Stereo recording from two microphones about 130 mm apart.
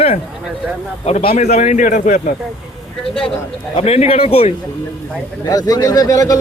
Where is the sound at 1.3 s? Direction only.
65° left (ahead or behind); by 2.2 s 90° left.